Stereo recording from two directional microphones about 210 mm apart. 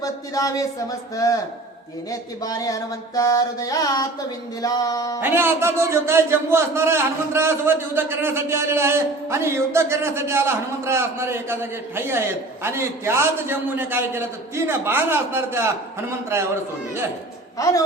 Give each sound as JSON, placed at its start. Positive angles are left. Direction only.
{"t": 0.0, "sound": "music", "side_deg": 15}
{"t": 5.2, "sound": "a man's voice", "side_deg": -10}
{"t": 17.6, "sound": "music", "side_deg": 15}